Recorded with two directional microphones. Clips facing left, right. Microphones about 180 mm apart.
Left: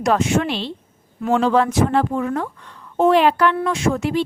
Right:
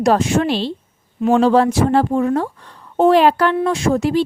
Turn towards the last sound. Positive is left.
turn(degrees=-35)  # may be behind; listen again after turning